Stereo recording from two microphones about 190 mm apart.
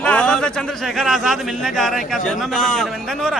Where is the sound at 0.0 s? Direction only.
5° left (ahead or behind).